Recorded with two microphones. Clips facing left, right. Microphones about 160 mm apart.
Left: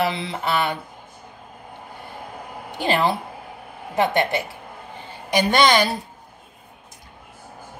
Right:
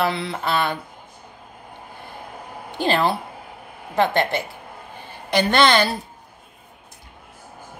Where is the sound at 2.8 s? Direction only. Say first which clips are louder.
Right 1 dB; 15° left (ahead or behind).